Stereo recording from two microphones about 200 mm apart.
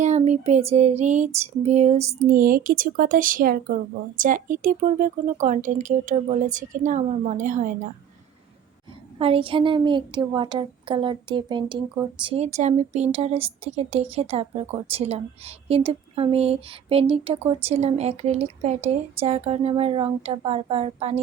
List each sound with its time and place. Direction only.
0.0 s a woman's voice: 35° right (ahead or behind)
9.1 s a woman's voice: 30° right (ahead or behind)